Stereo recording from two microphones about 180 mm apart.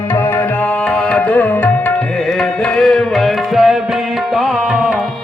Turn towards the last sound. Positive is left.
turn(degrees=-5)  # may be behind; listen again after turning